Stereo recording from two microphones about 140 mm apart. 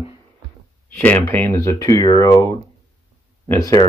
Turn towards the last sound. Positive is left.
turn(degrees=25)  # may be behind; listen again after turning